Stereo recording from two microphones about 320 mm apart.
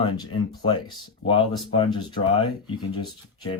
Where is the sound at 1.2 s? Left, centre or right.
Centre.